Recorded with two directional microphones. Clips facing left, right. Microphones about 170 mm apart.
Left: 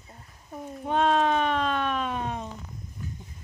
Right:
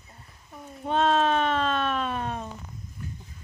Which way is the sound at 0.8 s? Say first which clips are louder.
Even; 15° left (ahead or behind).